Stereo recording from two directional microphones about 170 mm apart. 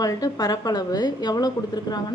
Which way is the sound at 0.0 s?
20° left (ahead or behind).